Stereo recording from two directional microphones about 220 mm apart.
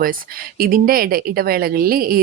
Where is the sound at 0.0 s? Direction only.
40° right (ahead or behind).